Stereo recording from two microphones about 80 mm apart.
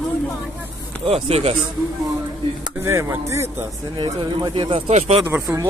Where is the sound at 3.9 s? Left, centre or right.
Right.